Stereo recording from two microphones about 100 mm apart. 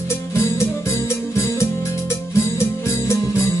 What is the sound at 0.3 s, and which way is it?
Music, 25° left (ahead or behind).